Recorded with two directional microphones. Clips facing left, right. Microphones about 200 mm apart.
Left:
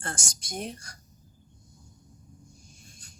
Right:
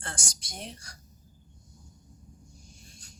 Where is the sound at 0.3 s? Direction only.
50° left (ahead or behind).